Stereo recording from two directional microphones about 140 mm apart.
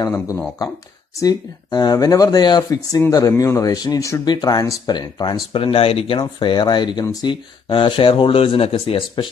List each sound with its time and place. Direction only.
0.0 s speech: 20° left (ahead or behind); by 9.3 s 40° left (ahead or behind)